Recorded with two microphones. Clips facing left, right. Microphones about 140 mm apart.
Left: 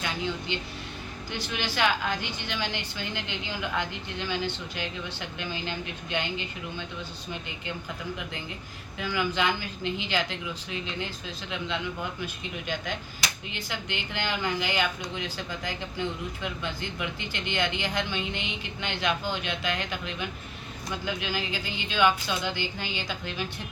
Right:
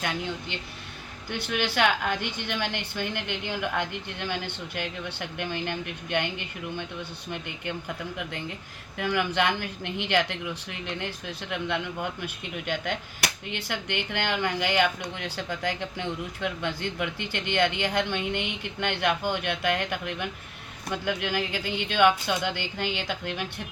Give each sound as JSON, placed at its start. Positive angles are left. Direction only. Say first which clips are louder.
{"t": 0.0, "sound": "speech", "louder": "even", "side_deg": -50}
{"t": 9.0, "sound": "speech", "louder": "right 2 dB", "side_deg": -65}